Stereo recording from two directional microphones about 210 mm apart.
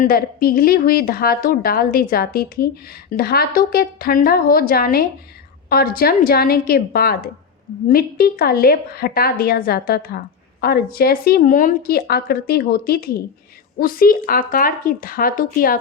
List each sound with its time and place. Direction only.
0.0 s a woman's voice: 45° left (ahead or behind)